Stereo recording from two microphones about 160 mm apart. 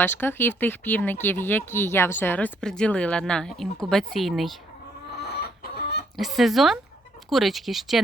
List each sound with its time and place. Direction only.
0.0 s speech: 10° left (ahead or behind)
5.2 s chicken: 90° left
6.1 s speech: centre (ahead or behind)